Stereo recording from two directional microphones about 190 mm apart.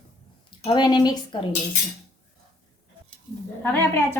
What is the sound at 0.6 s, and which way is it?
Speech, 25° left (ahead or behind).